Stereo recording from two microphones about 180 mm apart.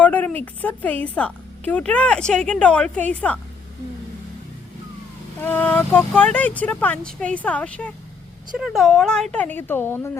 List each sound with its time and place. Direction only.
0.0 s a woman's voice: 10° left (ahead or behind)
5.4 s a woman's voice: 10° left (ahead or behind)